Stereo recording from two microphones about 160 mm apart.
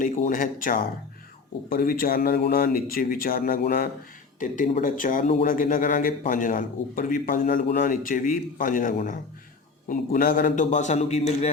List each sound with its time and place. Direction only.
0.0 s a man's voice: 55° left (ahead or behind)
4.4 s a man's voice: 55° left (ahead or behind)